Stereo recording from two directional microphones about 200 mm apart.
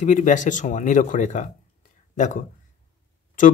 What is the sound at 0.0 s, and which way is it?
Speech, 40° left (ahead or behind).